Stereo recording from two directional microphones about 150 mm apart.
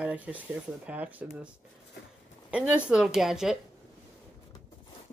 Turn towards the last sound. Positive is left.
turn(degrees=-5)  # may be behind; listen again after turning